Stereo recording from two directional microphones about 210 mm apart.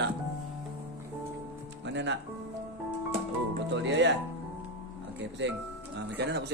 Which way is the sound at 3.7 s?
60° right (ahead or behind).